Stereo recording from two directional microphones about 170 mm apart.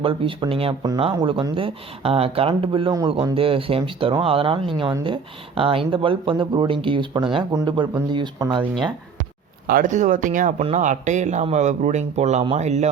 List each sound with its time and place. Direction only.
0.0 s speech: 30° right (ahead or behind)
9.6 s speech: 50° right (ahead or behind)